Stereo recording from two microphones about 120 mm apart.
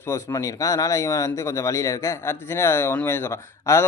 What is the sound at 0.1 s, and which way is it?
Speech, 20° left (ahead or behind).